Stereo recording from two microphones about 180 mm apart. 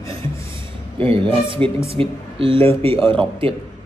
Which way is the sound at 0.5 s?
30° right (ahead or behind).